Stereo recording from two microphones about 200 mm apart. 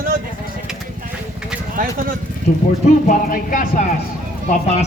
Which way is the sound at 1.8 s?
45° right (ahead or behind).